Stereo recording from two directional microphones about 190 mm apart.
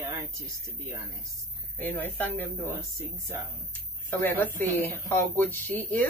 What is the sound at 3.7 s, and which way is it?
Speech, 10° left (ahead or behind).